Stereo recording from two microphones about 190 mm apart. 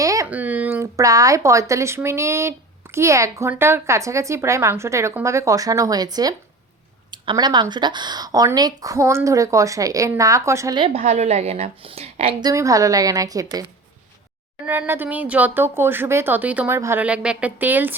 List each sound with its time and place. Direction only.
0.0 s speech: 15° right (ahead or behind)